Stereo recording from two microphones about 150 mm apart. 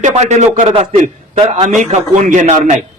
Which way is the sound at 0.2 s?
50° right (ahead or behind).